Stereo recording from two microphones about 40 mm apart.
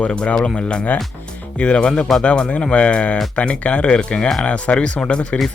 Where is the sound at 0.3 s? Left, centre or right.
Left.